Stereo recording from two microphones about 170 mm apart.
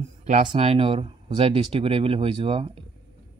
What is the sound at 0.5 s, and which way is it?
Speech, 35° right (ahead or behind).